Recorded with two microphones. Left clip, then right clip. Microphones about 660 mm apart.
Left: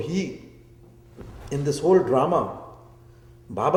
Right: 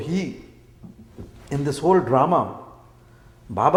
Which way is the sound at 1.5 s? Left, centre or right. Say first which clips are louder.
Right 1 dB; right.